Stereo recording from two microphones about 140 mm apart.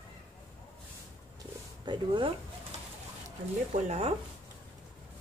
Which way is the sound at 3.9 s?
45° right (ahead or behind).